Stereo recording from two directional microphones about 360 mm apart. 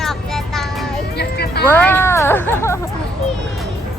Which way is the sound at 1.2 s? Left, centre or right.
Left.